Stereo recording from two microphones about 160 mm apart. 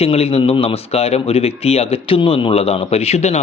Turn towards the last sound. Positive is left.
turn(degrees=40)  # may be behind; listen again after turning